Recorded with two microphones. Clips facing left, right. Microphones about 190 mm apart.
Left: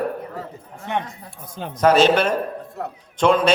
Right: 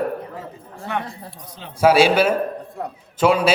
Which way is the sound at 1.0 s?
35° right (ahead or behind).